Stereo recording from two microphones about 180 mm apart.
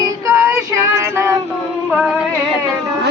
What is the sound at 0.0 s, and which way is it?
Female singing, 15° right (ahead or behind).